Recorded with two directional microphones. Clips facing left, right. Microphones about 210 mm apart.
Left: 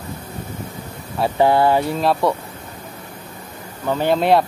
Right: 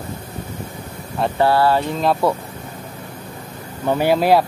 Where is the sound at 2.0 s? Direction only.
Centre (ahead or behind).